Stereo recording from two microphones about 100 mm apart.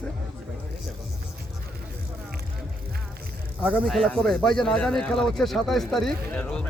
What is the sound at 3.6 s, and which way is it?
Speech, 15° right (ahead or behind).